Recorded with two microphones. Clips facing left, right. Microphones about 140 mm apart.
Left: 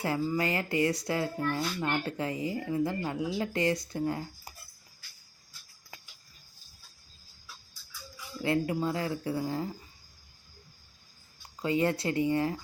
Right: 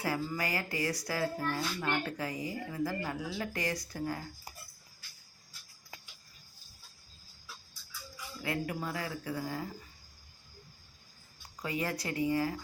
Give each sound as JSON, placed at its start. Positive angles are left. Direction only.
{"t": 0.0, "sound": "speech", "side_deg": 25}
{"t": 8.4, "sound": "speech", "side_deg": 25}
{"t": 11.6, "sound": "speech", "side_deg": 25}